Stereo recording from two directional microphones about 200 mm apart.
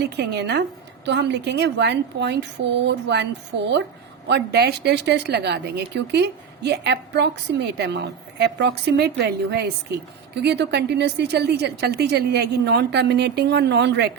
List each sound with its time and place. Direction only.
0.0 s a woman's voice: 55° right (ahead or behind)
4.3 s a woman's voice: 55° right (ahead or behind)